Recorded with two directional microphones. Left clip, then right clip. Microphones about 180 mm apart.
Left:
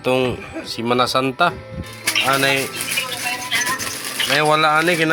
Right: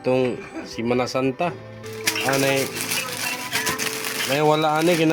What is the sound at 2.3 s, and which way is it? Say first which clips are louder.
Speech: left 3 dB; 10° right (ahead or behind).